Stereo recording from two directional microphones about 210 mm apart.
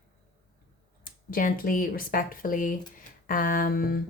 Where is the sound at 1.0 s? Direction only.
40° left (ahead or behind).